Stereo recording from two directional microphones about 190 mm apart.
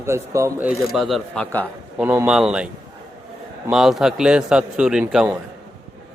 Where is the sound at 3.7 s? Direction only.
Centre (ahead or behind).